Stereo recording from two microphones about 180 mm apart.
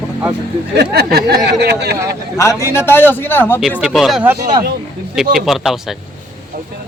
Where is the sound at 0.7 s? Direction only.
65° right (ahead or behind).